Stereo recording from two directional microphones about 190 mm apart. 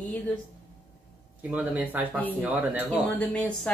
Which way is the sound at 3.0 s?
5° left (ahead or behind).